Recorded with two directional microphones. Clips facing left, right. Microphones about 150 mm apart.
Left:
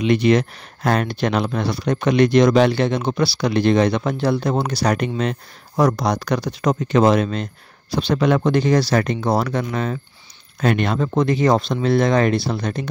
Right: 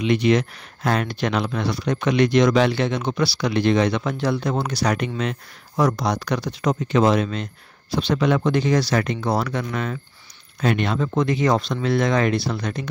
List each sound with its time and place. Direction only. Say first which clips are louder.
0.0 s speech: left 2 dB; 40° left (ahead or behind)
10.6 s speech: left 2 dB; 50° left (ahead or behind); by 12.8 s 30° left (ahead or behind)